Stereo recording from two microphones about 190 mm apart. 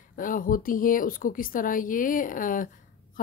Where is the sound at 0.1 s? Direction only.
45° left (ahead or behind).